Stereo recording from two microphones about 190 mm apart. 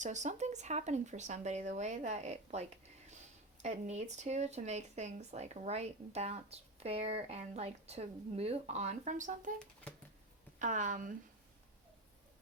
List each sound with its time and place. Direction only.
0.0 s speech: 40° right (ahead or behind)
10.6 s speech: 40° right (ahead or behind)